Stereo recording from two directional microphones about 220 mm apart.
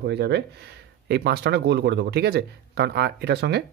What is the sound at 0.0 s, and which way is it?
Speech, 50° right (ahead or behind).